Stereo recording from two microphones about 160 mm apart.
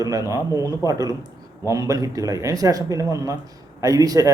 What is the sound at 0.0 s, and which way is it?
Speech, 20° right (ahead or behind).